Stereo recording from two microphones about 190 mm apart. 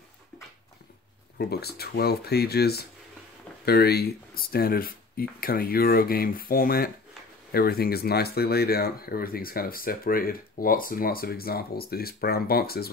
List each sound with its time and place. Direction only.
1.4 s speech: 55° left (ahead or behind)